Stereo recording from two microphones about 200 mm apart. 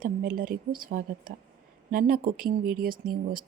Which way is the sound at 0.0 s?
45° right (ahead or behind).